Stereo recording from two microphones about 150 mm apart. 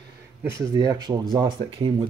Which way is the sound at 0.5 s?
25° right (ahead or behind).